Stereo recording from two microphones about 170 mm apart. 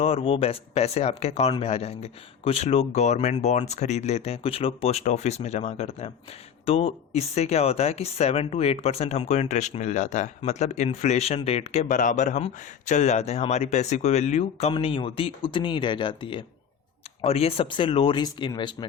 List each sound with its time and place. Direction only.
0.0 s speech: 35° left (ahead or behind)